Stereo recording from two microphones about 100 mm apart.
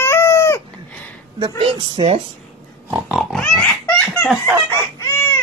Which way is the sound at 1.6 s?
80° right.